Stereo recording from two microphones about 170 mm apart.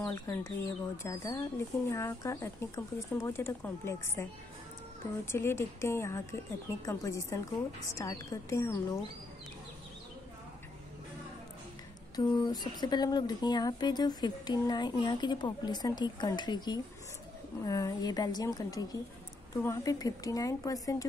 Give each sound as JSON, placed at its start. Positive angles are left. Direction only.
{"t": 0.1, "sound": "speech", "side_deg": 15}
{"t": 12.2, "sound": "speech", "side_deg": 25}